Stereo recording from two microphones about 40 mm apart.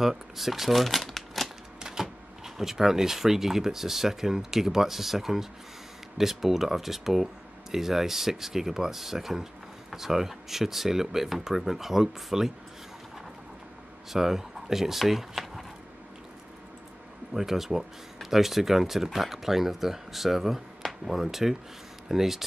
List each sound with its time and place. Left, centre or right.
0.0 s speech: centre
1.8 s speech: centre
14.1 s speech: centre
17.3 s speech: centre